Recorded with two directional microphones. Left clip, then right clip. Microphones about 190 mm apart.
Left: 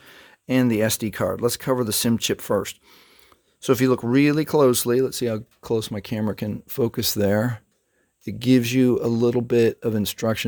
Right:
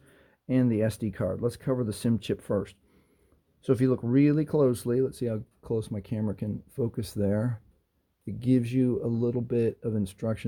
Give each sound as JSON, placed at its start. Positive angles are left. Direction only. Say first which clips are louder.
{"t": 0.0, "sound": "speech", "louder": "left 9 dB", "side_deg": 25}